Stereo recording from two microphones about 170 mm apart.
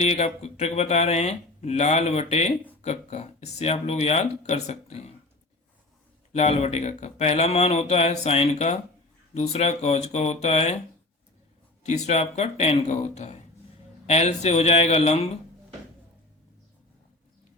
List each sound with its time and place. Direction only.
0.0 s speech: 40° left (ahead or behind)
6.3 s speech: 40° left (ahead or behind)
11.9 s speech: 40° left (ahead or behind)